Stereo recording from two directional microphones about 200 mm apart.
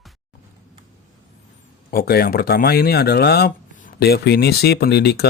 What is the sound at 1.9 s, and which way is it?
Speech, 50° left (ahead or behind).